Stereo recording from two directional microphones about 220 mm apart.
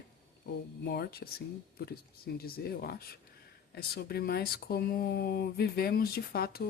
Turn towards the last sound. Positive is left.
turn(degrees=45)  # may be behind; listen again after turning